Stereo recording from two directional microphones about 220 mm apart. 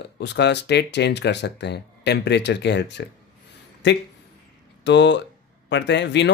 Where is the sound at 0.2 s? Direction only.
50° left (ahead or behind).